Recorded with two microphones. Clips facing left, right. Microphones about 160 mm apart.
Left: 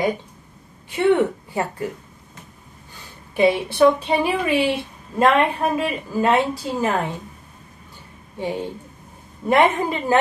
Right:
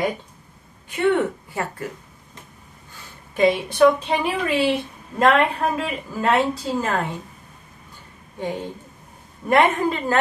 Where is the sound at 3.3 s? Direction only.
10° left (ahead or behind).